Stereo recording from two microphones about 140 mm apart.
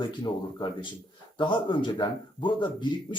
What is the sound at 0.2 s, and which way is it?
A man's voice, 35° left (ahead or behind).